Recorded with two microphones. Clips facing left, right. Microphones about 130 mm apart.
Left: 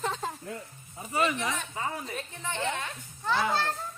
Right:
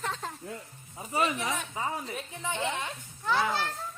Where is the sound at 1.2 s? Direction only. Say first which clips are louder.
Left 1 dB; 10° right (ahead or behind).